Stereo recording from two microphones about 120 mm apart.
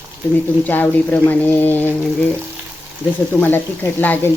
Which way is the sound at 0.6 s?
15° left (ahead or behind).